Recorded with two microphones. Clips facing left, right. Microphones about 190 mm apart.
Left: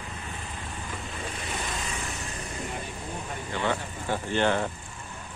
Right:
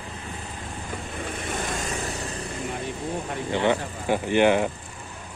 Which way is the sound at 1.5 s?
45° right (ahead or behind).